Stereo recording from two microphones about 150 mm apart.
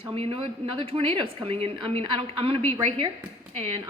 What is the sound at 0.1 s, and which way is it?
A woman's voice, 40° right (ahead or behind).